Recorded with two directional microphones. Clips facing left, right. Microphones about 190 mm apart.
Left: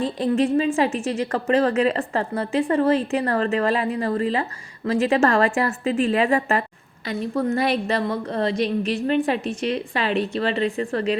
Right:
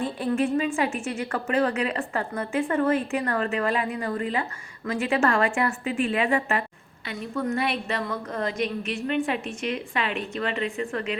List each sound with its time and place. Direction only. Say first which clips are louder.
0.5 s a woman's voice: left 5 dB; 30° left (ahead or behind)